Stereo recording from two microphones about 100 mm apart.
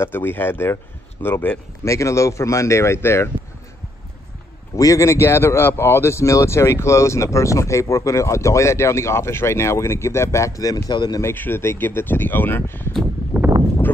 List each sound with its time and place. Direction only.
0.0 s speech: 20° left (ahead or behind)
1.9 s speech: 30° left (ahead or behind)
4.7 s speech: 35° left (ahead or behind)
11.1 s speech: 20° left (ahead or behind)
13.3 s a sound: 15° right (ahead or behind)